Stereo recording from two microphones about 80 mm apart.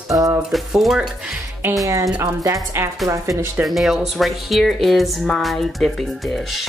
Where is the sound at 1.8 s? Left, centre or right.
Right.